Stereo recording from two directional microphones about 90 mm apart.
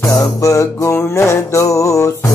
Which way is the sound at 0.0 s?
40° left (ahead or behind).